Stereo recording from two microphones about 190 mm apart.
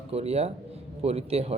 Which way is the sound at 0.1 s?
35° right (ahead or behind).